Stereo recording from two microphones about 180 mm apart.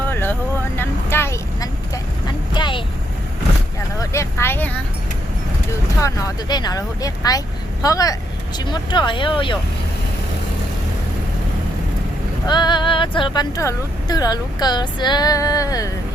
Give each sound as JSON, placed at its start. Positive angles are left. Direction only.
{"t": 0.1, "sound": "vehicle", "side_deg": 10}
{"t": 2.2, "sound": "vehicle", "side_deg": 25}
{"t": 4.1, "sound": "vehicle", "side_deg": 15}
{"t": 6.0, "sound": "speech", "side_deg": 20}
{"t": 12.5, "sound": "speech", "side_deg": 25}